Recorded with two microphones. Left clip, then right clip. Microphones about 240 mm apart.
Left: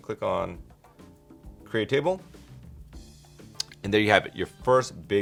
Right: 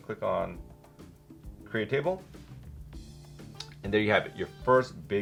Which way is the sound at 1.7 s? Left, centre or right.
Left.